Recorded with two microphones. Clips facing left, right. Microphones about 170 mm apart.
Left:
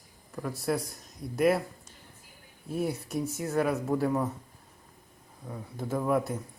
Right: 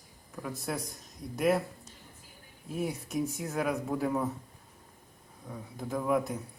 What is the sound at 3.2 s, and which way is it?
Speech, 40° left (ahead or behind).